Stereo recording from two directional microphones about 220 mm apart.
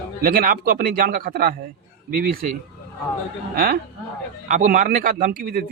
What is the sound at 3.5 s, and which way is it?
A man's voice, 40° right (ahead or behind).